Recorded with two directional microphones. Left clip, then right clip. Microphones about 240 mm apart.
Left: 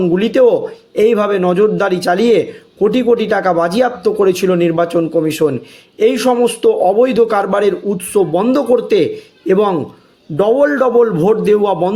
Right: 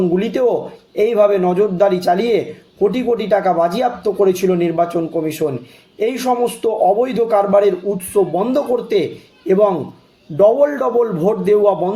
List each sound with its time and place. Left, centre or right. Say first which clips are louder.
0.1 s speech: left 5 dB; left